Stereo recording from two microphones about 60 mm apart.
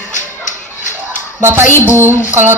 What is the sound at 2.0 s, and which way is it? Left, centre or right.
Speech, right.